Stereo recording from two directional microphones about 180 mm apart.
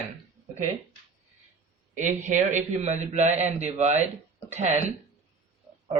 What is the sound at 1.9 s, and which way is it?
A man's voice, 40° right (ahead or behind).